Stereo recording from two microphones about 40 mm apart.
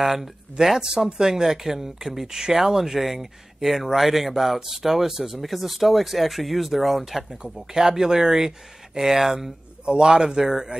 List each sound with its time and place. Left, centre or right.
0.0 s speech: centre
9.8 s speech: right